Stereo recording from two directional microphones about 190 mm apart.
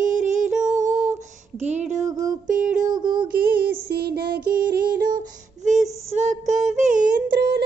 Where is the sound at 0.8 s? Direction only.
40° right (ahead or behind).